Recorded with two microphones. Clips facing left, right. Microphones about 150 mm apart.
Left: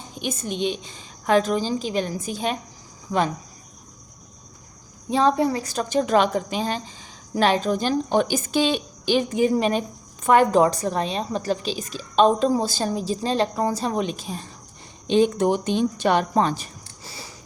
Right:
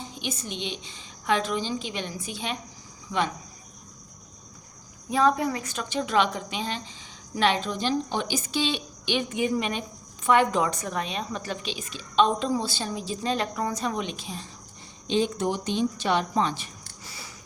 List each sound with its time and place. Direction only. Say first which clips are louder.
0.1 s a woman's voice: left 10 dB; 50° left (ahead or behind)
5.0 s a woman's voice: left 3 dB; 30° left (ahead or behind)
15.0 s speech: left 6 dB; 55° left (ahead or behind); by 17.3 s 30° left (ahead or behind)